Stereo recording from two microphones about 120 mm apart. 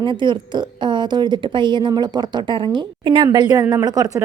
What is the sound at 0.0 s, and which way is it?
A woman's voice, 40° right (ahead or behind).